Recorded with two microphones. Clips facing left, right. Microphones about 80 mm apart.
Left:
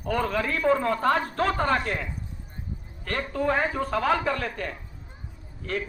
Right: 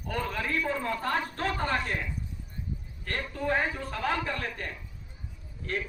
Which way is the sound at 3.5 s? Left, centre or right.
Left.